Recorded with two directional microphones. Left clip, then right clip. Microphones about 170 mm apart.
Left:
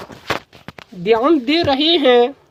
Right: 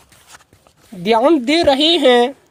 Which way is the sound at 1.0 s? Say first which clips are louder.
Right 1 dB; 35° right (ahead or behind).